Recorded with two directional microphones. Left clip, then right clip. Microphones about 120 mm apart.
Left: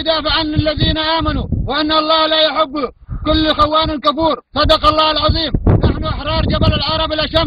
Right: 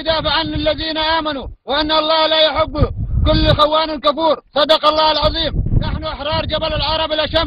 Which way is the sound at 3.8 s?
20° right (ahead or behind).